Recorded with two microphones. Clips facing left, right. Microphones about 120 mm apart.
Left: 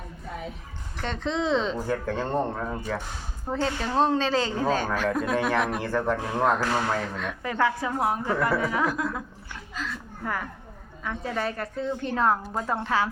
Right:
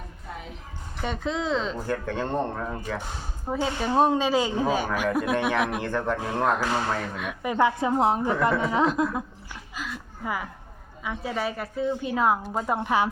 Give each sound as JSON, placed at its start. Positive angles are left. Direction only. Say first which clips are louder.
{"t": 1.0, "sound": "speech", "louder": "left 1 dB", "side_deg": -10}
{"t": 3.4, "sound": "speech", "louder": "right 1 dB", "side_deg": -10}
{"t": 7.2, "sound": "a woman's voice", "louder": "right 2 dB", "side_deg": -15}
{"t": 9.7, "sound": "a woman's voice", "louder": "left 1 dB", "side_deg": -10}